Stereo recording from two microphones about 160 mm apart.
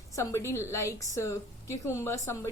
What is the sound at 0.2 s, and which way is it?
A woman's voice, 15° left (ahead or behind).